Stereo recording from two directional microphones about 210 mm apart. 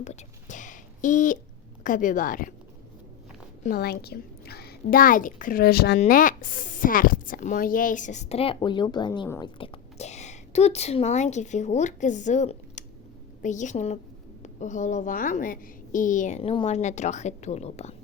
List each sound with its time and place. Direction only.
0.0 s whispering: 35° left (ahead or behind)
1.8 s a woman's voice: 40° left (ahead or behind)
3.6 s a child's voice: 45° left (ahead or behind)